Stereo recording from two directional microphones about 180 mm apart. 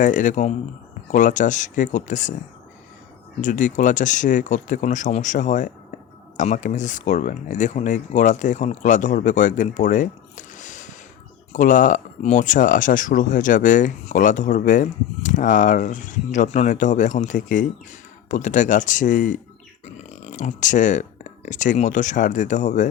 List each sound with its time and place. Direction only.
0.0 s speech: 45° left (ahead or behind)
3.4 s speech: 45° left (ahead or behind)